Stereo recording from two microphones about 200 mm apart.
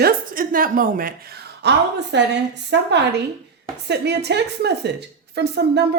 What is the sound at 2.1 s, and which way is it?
A woman's voice, 60° right (ahead or behind).